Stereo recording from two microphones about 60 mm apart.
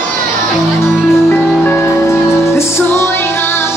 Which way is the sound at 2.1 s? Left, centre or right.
Left.